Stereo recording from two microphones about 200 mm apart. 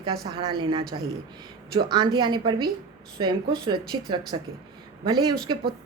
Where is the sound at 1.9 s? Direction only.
20° right (ahead or behind).